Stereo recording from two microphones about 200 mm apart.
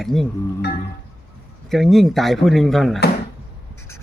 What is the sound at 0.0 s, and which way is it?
Speech, centre (ahead or behind).